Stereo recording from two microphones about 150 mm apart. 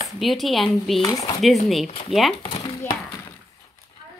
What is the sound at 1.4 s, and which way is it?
Speech, centre (ahead or behind).